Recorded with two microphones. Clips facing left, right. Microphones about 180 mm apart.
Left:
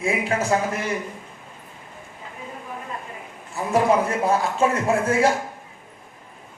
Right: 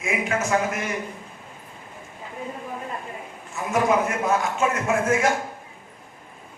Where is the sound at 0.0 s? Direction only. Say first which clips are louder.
Left 2 dB; 35° left (ahead or behind).